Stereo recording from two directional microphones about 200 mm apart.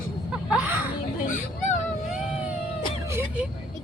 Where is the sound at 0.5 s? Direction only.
5° right (ahead or behind).